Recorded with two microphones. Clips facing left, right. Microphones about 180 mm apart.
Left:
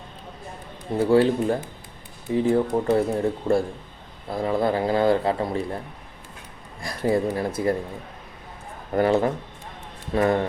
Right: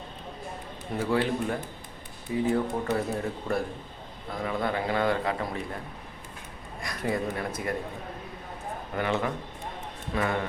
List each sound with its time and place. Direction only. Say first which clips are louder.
0.9 s a man's voice: left 8 dB; 30° left (ahead or behind)
6.8 s a man's voice: left 7 dB; 30° left (ahead or behind)
8.9 s a man's voice: left 9 dB; 40° left (ahead or behind)